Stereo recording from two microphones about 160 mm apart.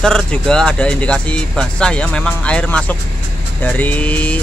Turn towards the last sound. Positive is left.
turn(degrees=10)  # may be behind; listen again after turning